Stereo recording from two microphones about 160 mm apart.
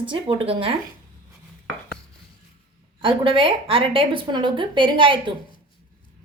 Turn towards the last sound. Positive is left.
turn(degrees=-30)  # may be behind; listen again after turning